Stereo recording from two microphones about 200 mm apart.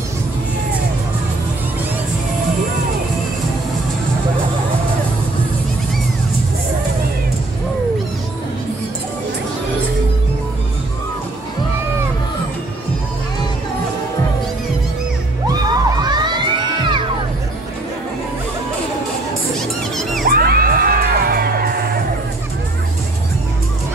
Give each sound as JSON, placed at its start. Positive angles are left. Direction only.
{"t": 15.4, "sound": "children shouting", "side_deg": -20}
{"t": 20.2, "sound": "music", "side_deg": -50}